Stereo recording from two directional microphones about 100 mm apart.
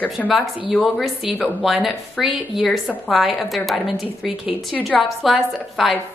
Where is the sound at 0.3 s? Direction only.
Centre (ahead or behind).